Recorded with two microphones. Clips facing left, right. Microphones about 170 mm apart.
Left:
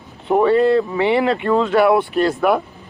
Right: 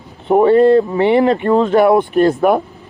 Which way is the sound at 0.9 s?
45° right (ahead or behind).